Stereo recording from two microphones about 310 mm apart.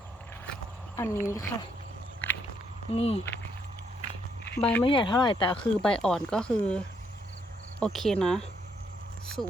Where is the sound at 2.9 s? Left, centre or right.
Centre.